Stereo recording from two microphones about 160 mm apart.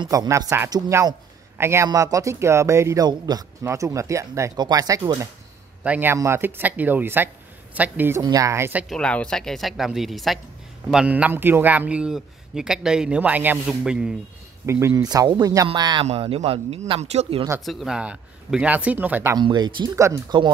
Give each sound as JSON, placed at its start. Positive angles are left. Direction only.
{"t": 0.0, "sound": "a man's voice", "side_deg": -25}
{"t": 8.2, "sound": "a man's voice", "side_deg": -20}
{"t": 8.8, "sound": "a woman's voice", "side_deg": 5}
{"t": 14.7, "sound": "a man's voice", "side_deg": -15}
{"t": 16.1, "sound": "speech", "side_deg": -40}
{"t": 17.6, "sound": "a man's voice", "side_deg": 0}
{"t": 19.3, "sound": "a man's voice", "side_deg": -25}